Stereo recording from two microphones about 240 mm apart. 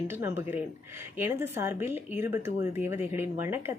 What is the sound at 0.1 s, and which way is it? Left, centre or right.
A woman's voice, centre.